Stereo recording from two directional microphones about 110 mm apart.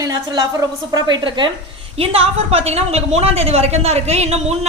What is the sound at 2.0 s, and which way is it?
A woman's voice, 65° right (ahead or behind).